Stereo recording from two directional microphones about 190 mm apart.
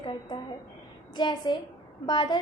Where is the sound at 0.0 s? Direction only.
25° left (ahead or behind).